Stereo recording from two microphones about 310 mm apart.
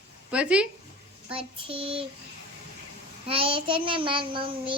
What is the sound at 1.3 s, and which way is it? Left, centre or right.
Child singing, centre.